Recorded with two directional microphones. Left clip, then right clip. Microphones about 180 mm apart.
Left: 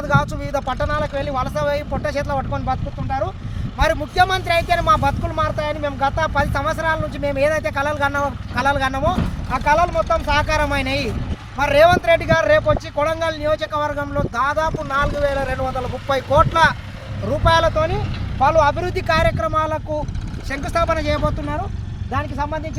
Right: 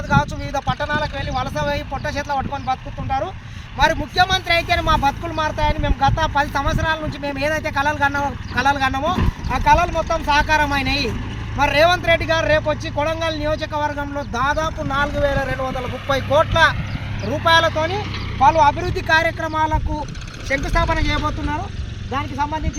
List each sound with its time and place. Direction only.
0.1 s speech: 20° left (ahead or behind)
20.7 s speech: 30° left (ahead or behind)